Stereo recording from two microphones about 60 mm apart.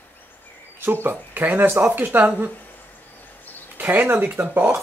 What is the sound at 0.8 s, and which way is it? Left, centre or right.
Speech, right.